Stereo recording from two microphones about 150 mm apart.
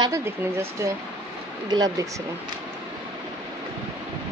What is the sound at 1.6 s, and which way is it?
Speech, 25° right (ahead or behind).